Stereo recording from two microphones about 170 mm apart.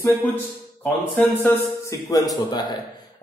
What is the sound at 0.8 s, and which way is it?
A man's voice, 10° left (ahead or behind).